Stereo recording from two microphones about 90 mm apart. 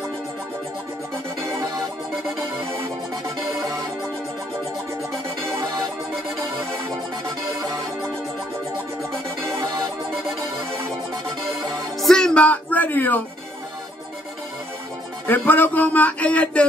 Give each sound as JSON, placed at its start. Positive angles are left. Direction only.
{"t": 12.0, "sound": "music", "side_deg": 5}
{"t": 15.2, "sound": "speech", "side_deg": 20}